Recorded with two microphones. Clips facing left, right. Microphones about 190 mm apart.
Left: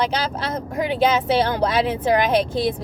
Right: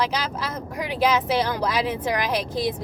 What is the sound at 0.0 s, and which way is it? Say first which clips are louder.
Speech: left 3 dB; 30° left (ahead or behind).